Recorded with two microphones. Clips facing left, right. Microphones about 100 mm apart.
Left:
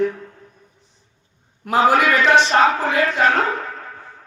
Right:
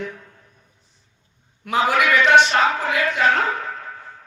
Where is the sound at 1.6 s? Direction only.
40° left (ahead or behind).